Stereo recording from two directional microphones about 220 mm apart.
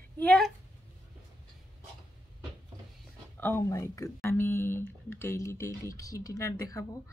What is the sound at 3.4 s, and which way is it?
Speech, 10° left (ahead or behind).